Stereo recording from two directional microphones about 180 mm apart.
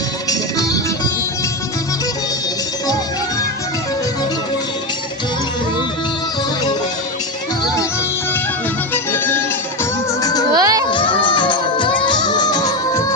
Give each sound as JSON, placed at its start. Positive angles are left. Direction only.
{"t": 0.3, "sound": "music", "side_deg": 20}
{"t": 8.9, "sound": "music", "side_deg": 10}
{"t": 10.5, "sound": "music", "side_deg": -20}
{"t": 10.9, "sound": "music", "side_deg": 25}